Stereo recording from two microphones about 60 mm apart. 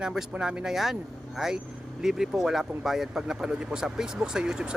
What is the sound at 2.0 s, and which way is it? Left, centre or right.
Speech, centre.